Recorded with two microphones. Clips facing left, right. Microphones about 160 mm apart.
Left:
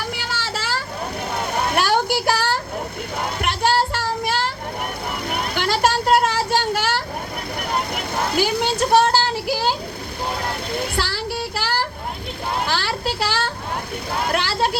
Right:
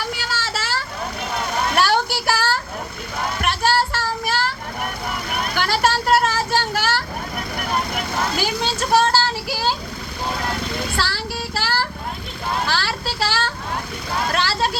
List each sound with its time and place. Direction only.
0.3 s vehicle: 15° left (ahead or behind)
1.7 s a sound: 15° left (ahead or behind)
3.4 s child singing: 20° left (ahead or behind)
5.4 s vehicle: 20° left (ahead or behind)
8.8 s speech: 20° left (ahead or behind)
10.9 s child singing: 15° left (ahead or behind)
12.6 s a sound: 20° left (ahead or behind)
14.3 s speech: 15° left (ahead or behind)